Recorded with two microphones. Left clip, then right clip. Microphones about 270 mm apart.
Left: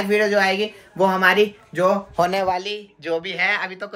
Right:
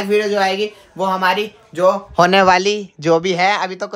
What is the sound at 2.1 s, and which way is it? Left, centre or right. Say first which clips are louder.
Speech: right 8 dB; right.